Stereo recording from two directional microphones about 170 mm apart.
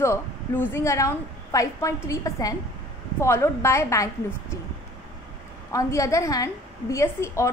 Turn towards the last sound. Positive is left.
turn(degrees=15)  # may be behind; listen again after turning